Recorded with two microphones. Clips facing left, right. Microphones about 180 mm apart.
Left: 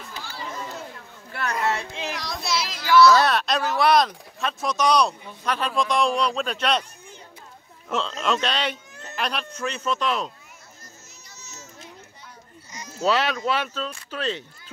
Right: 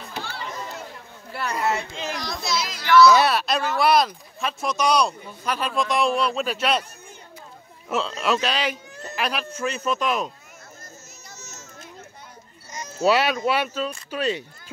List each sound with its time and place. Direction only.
0.1 s a sound: 65° right (ahead or behind)
1.3 s a sound: 5° right (ahead or behind)
2.8 s a child's voice: 10° left (ahead or behind)
3.1 s speech: 10° right (ahead or behind)
7.9 s speech: 5° right (ahead or behind)
11.3 s children playing: 45° right (ahead or behind)
13.0 s speech: 10° right (ahead or behind)